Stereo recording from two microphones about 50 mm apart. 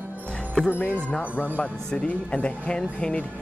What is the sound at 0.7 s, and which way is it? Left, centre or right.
Speech, left.